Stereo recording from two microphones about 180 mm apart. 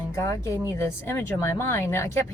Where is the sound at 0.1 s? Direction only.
15° left (ahead or behind).